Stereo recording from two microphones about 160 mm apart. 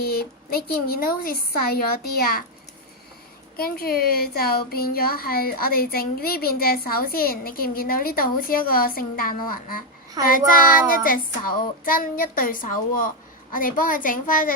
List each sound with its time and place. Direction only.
0.0 s a woman's voice: 70° left (ahead or behind)
3.6 s a woman's voice: 70° left (ahead or behind)